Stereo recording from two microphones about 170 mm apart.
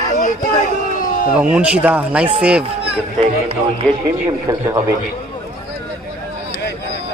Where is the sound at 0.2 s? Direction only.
50° left (ahead or behind).